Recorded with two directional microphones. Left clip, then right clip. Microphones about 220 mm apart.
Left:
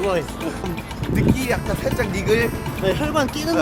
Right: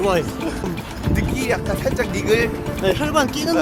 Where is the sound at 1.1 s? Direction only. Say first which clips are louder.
Left 1 dB; 15° left (ahead or behind).